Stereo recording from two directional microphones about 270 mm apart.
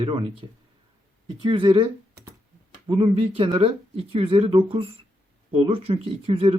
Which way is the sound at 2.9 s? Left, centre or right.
Right.